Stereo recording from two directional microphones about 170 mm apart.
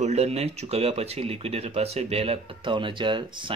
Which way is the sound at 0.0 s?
40° right (ahead or behind).